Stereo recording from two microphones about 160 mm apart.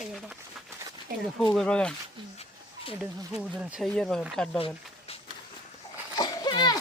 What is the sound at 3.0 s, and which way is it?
Speech, 5° right (ahead or behind).